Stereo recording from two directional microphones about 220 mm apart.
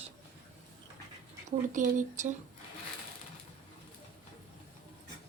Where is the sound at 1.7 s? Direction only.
35° right (ahead or behind).